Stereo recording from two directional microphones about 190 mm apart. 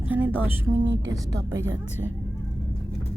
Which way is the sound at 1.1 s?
15° right (ahead or behind).